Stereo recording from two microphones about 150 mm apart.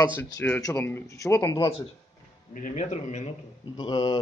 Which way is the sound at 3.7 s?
30° left (ahead or behind).